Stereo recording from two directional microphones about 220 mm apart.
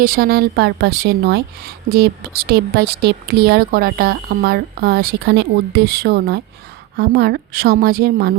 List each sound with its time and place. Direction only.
0.0 s a woman's voice: 40° right (ahead or behind)